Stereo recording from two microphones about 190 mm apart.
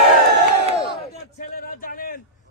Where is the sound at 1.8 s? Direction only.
50° left (ahead or behind).